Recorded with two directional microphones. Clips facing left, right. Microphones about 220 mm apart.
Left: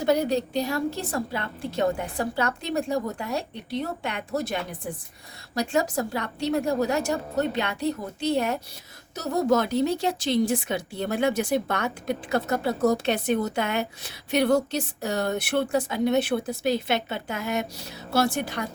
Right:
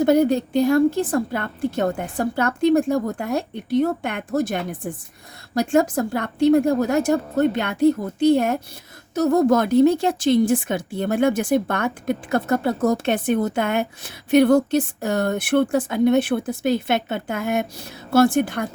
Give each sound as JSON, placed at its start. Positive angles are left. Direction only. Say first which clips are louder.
{"t": 0.0, "sound": "a woman's voice", "louder": "right 6 dB", "side_deg": -50}